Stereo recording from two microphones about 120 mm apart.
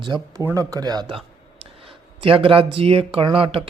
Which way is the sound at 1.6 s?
50° right (ahead or behind).